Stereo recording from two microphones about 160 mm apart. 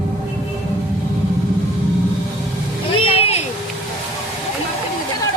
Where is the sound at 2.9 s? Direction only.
35° left (ahead or behind).